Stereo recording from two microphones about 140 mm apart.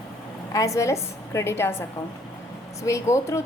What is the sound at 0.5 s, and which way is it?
A woman's voice, 25° left (ahead or behind).